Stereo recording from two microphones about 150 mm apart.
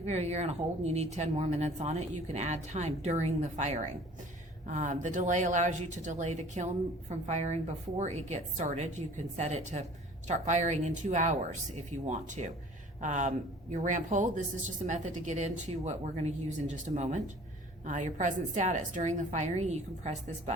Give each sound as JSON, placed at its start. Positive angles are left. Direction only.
{"t": 0.0, "sound": "a woman's voice", "side_deg": -45}